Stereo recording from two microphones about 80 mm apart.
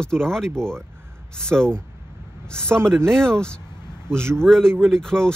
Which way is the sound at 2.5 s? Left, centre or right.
Centre.